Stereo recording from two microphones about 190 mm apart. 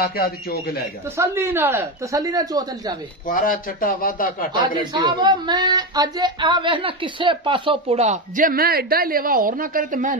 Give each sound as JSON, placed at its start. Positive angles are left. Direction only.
{"t": 0.0, "sound": "a man's voice", "side_deg": 55}
{"t": 1.1, "sound": "speech", "side_deg": -15}
{"t": 3.3, "sound": "a man's voice", "side_deg": 45}
{"t": 5.0, "sound": "speech", "side_deg": -25}